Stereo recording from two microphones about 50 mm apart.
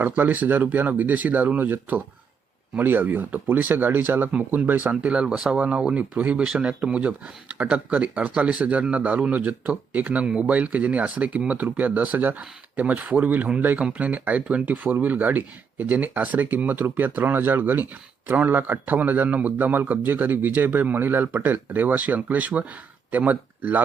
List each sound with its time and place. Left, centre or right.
0.0 s speech: right
4.9 s speech: right